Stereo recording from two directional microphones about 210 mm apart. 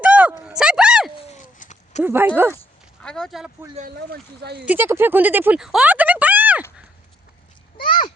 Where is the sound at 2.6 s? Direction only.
5° left (ahead or behind).